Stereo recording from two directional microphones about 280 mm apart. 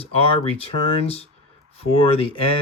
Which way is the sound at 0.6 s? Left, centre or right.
Left.